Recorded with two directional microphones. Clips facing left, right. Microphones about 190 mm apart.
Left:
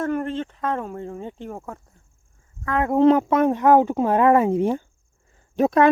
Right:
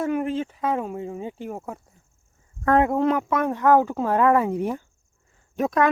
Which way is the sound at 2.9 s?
30° left (ahead or behind).